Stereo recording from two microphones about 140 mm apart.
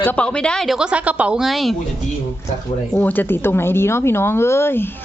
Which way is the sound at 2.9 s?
15° left (ahead or behind).